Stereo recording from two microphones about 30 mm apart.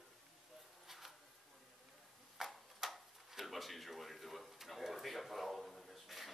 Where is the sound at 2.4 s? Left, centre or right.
Centre.